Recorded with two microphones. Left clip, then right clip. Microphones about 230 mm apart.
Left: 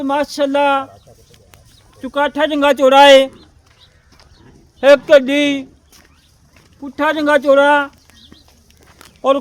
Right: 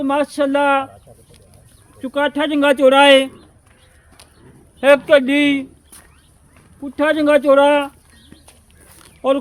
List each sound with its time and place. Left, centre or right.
0.0 s speech: left
2.0 s speech: left
4.8 s a man's voice: left
6.8 s speech: left
9.0 s a sound: left